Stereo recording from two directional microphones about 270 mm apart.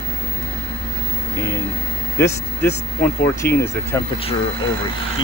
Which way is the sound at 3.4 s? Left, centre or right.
Left.